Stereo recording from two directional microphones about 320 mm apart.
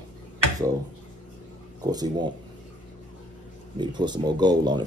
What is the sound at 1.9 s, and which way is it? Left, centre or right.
Speech, centre.